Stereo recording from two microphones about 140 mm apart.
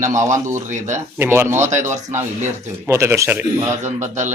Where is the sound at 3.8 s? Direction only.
60° right (ahead or behind).